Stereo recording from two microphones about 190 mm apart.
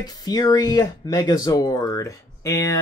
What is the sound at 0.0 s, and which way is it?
Speech, 20° left (ahead or behind).